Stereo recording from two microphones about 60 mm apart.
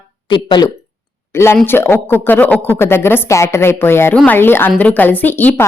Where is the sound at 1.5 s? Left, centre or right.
Left.